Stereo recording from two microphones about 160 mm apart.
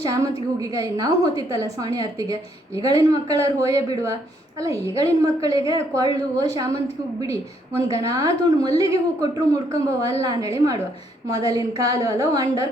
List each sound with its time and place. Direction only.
0.0 s a woman's voice: 20° right (ahead or behind)
7.8 s a woman's voice: 20° right (ahead or behind)